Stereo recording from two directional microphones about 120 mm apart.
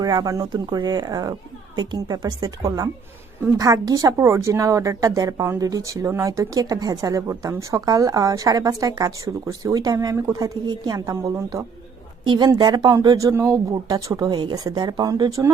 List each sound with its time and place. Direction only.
0.0 s a woman's voice: 30° right (ahead or behind)